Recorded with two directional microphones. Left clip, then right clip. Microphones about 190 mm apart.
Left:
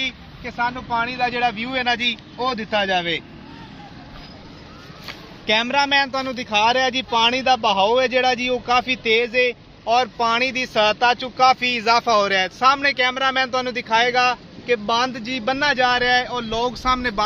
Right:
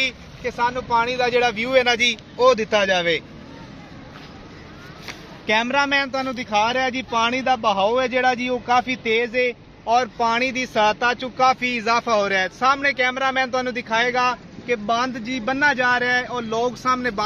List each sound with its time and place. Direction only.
0.0 s speech: 55° right (ahead or behind); by 3.1 s 30° right (ahead or behind)
5.5 s speech: 40° left (ahead or behind)